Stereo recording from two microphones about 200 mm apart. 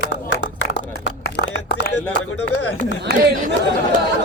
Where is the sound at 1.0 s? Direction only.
60° left (ahead or behind); by 2.8 s 80° left.